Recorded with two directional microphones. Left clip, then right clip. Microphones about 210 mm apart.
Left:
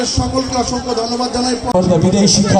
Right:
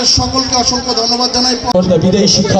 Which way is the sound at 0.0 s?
35° right (ahead or behind).